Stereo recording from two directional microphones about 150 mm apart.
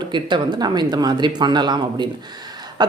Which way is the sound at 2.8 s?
30° right (ahead or behind).